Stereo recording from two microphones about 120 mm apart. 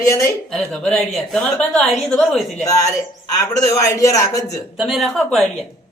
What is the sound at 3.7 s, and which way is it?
Speech, 30° left (ahead or behind).